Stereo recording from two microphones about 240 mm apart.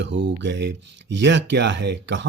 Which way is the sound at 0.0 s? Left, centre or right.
Right.